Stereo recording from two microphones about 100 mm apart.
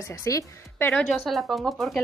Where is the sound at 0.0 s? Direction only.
30° left (ahead or behind).